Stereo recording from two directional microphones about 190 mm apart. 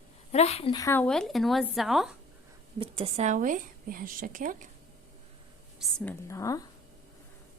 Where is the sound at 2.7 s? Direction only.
30° right (ahead or behind).